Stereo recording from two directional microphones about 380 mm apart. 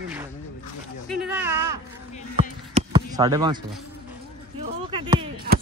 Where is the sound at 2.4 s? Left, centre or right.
Centre.